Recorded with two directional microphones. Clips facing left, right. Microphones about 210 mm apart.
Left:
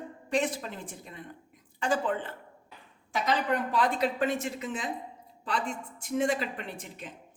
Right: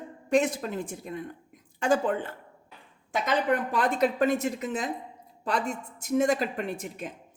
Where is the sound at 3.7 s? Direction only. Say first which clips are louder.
Right 2 dB; 45° right (ahead or behind).